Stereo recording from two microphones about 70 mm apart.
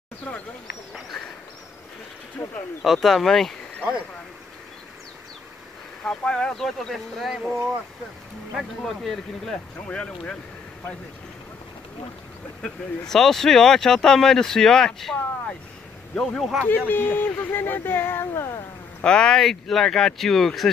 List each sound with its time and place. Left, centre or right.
2.8 s speech: centre
6.0 s speech: centre
9.8 s speech: centre
12.6 s speech: centre
16.2 s speech: centre
16.6 s speech: left
19.0 s speech: centre